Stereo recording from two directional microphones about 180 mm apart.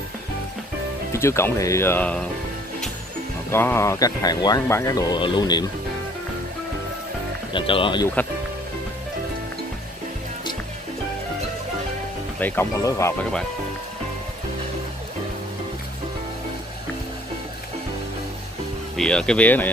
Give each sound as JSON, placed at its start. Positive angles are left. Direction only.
{"t": 1.1, "sound": "speech", "side_deg": 15}
{"t": 3.5, "sound": "speech", "side_deg": 15}
{"t": 7.5, "sound": "speech", "side_deg": 30}
{"t": 12.4, "sound": "speech", "side_deg": 10}
{"t": 18.9, "sound": "speech", "side_deg": 5}